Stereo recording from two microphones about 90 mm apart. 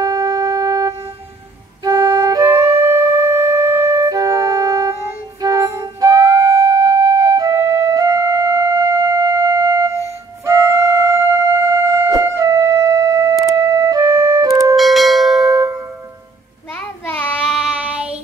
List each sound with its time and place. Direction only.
0.0 s wind instrument: 40° right (ahead or behind)
5.4 s music: 35° right (ahead or behind)
14.8 s bell: centre (ahead or behind)
17.0 s child singing: 20° left (ahead or behind)